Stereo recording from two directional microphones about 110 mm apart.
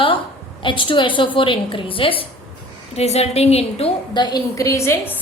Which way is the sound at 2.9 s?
75° left (ahead or behind).